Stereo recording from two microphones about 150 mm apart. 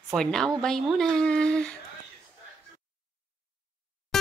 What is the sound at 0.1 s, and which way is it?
Speech, 5° left (ahead or behind).